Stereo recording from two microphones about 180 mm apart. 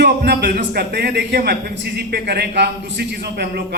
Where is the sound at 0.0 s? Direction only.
65° right (ahead or behind).